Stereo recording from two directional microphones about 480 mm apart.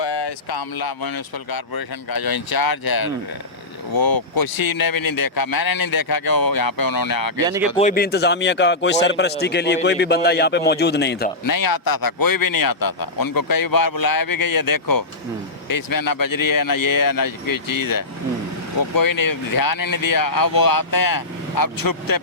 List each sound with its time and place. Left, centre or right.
0.0 s speech: left
7.4 s speech: centre
7.8 s a man's voice: centre
11.4 s speech: left